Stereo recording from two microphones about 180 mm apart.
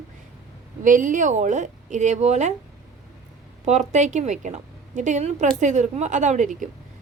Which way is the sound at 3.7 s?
40° right (ahead or behind).